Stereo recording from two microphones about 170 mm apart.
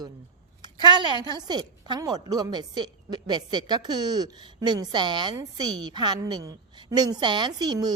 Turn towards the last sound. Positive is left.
turn(degrees=-25)  # may be behind; listen again after turning